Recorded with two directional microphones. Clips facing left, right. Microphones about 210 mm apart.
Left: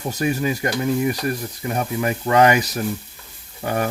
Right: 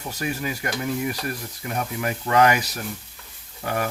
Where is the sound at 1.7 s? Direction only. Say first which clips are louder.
Left 4 dB; 40° left (ahead or behind).